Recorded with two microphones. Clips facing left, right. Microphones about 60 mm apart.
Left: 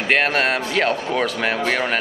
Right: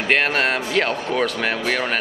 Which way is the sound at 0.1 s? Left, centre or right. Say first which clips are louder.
Left 1 dB; centre.